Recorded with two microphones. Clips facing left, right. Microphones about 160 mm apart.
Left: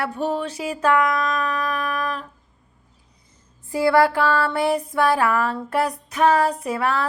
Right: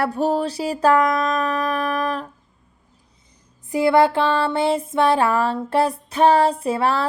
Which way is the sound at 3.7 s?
20° right (ahead or behind).